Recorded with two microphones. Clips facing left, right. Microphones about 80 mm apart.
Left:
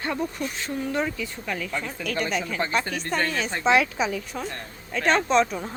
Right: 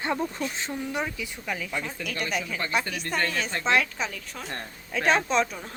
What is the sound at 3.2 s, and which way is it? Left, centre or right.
A woman's voice, centre.